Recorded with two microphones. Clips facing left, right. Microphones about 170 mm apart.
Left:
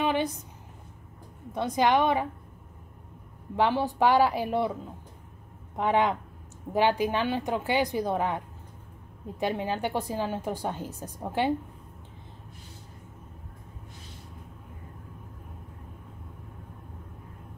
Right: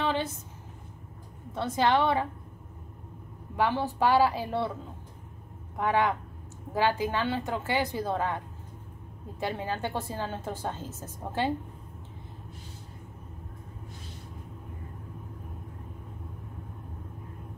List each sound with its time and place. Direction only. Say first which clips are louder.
0.0 s a sound: left 3 dB; 15° left (ahead or behind)
1.5 s a woman's voice: left 2 dB; 15° left (ahead or behind)
3.5 s a woman's voice: left 2 dB; 20° left (ahead or behind)
5.8 s a woman's voice: left 2 dB; 20° left (ahead or behind)
9.4 s a woman's voice: left 3 dB; 15° left (ahead or behind)